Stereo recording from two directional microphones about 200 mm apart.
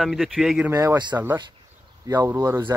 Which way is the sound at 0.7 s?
15° right (ahead or behind).